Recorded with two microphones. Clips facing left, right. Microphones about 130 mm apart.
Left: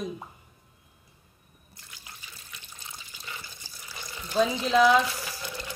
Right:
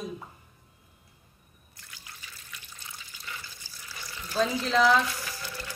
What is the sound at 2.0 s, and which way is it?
Water, 25° left (ahead or behind).